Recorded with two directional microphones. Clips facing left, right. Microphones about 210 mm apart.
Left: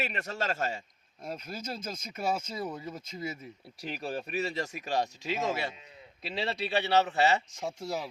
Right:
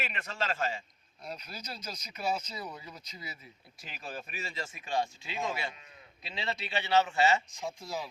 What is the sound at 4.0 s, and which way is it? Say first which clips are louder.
A man's voice: left 8 dB; 35° left (ahead or behind).